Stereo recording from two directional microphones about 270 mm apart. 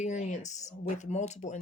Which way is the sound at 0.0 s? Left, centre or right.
Left.